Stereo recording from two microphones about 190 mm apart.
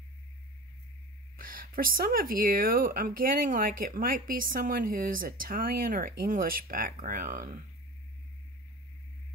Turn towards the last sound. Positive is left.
turn(degrees=-45)  # may be behind; listen again after turning